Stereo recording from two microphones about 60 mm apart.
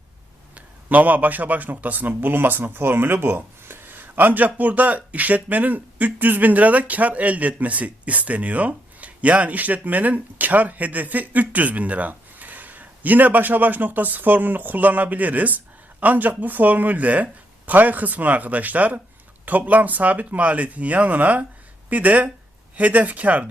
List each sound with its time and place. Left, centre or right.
0.5 s a man's voice: right